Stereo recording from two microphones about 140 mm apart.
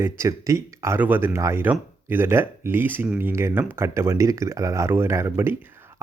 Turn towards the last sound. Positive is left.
turn(degrees=-15)  # may be behind; listen again after turning